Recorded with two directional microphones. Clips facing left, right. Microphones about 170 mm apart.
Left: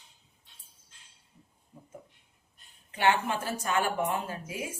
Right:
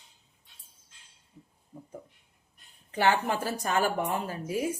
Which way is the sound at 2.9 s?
35° right (ahead or behind).